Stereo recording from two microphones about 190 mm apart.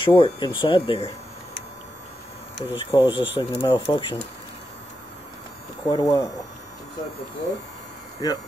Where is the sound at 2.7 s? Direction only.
25° left (ahead or behind).